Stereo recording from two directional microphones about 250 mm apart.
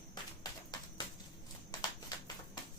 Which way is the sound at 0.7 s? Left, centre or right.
Centre.